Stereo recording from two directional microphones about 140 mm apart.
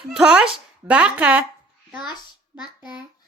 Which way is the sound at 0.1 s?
10° right (ahead or behind).